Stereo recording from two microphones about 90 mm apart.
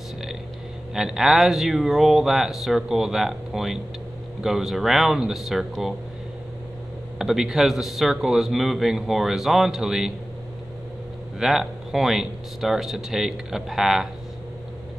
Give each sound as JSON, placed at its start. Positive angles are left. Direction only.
{"t": 0.9, "sound": "a man's voice", "side_deg": -5}
{"t": 7.2, "sound": "a man's voice", "side_deg": -5}
{"t": 11.3, "sound": "a man's voice", "side_deg": -5}